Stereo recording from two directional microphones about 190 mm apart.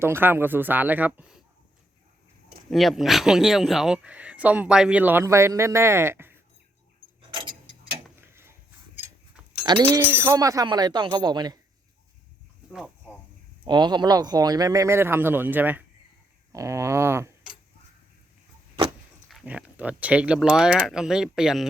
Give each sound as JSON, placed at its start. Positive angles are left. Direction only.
{"t": 0.0, "sound": "speech", "side_deg": -10}
{"t": 2.6, "sound": "speech", "side_deg": 0}
{"t": 7.2, "sound": "clock", "side_deg": -25}
{"t": 8.3, "sound": "a sound", "side_deg": -15}
{"t": 9.8, "sound": "speech", "side_deg": -10}
{"t": 13.7, "sound": "speech", "side_deg": -25}
{"t": 16.5, "sound": "a sound", "side_deg": -15}
{"t": 19.3, "sound": "speech", "side_deg": -5}